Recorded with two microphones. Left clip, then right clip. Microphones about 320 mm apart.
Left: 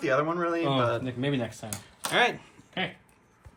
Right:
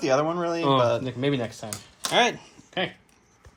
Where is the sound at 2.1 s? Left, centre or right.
Centre.